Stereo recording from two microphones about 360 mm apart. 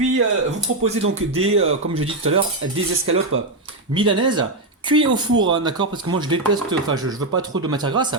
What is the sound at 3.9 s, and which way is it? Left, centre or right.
Speech, centre.